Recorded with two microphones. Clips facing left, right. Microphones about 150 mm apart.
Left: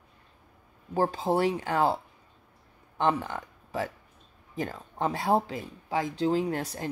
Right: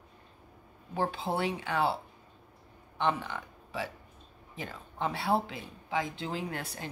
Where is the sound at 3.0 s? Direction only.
40° left (ahead or behind).